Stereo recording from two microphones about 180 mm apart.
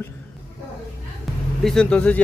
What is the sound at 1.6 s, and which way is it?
Speech, 5° left (ahead or behind).